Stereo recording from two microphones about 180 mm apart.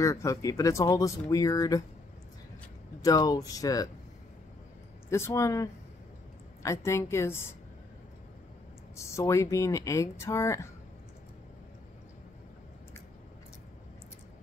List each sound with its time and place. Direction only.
0.0 s speech: 15° left (ahead or behind)
3.0 s speech: 20° left (ahead or behind)
5.1 s speech: 15° left (ahead or behind)
8.9 s speech: 15° left (ahead or behind)